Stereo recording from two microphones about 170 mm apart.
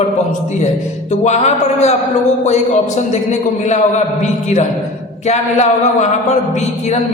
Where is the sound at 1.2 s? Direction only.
40° left (ahead or behind).